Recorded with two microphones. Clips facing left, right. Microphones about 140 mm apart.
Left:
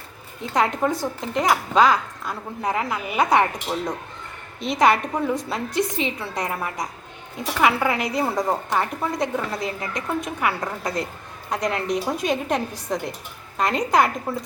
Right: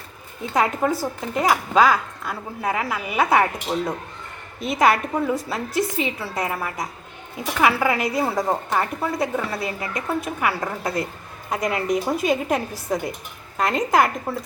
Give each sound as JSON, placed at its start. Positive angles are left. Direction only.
{"t": 0.5, "sound": "a woman's voice", "side_deg": -5}